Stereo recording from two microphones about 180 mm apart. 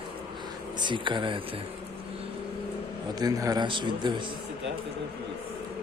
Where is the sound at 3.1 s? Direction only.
20° right (ahead or behind).